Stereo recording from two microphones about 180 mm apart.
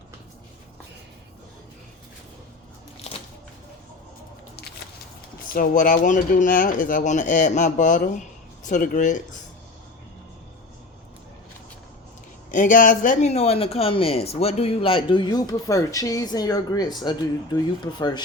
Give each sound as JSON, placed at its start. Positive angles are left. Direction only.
{"t": 5.5, "sound": "speech", "side_deg": 50}
{"t": 12.5, "sound": "speech", "side_deg": 45}